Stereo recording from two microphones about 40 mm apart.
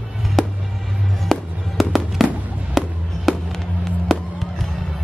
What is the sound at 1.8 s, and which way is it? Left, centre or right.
Fireworks, centre.